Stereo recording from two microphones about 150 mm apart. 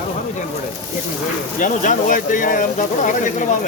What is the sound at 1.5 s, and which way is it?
Speech, 60° left (ahead or behind).